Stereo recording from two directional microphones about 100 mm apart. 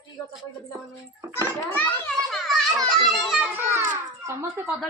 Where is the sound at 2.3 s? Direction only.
Centre (ahead or behind).